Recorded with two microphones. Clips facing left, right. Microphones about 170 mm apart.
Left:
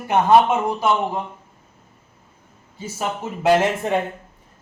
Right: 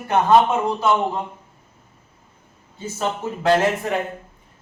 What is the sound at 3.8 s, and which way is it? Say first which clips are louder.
Speech: left 3 dB; 25° left (ahead or behind).